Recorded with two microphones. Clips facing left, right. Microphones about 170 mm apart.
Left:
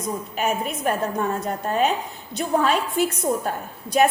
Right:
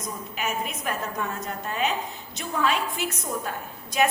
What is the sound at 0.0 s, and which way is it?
A woman's voice, 35° left (ahead or behind).